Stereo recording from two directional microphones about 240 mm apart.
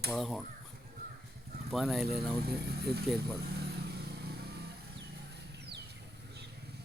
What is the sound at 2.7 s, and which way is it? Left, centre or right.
Speech, right.